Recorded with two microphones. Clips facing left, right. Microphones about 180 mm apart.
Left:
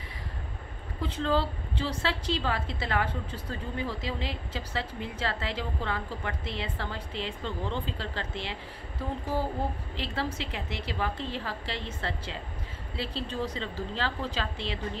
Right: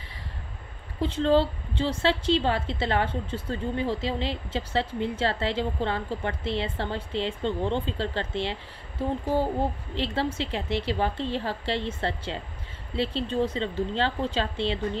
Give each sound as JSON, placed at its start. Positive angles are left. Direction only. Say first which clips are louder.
{"t": 1.0, "sound": "a woman's voice", "louder": "right 6 dB", "side_deg": -25}
{"t": 9.9, "sound": "a woman's voice", "louder": "right 7 dB", "side_deg": -30}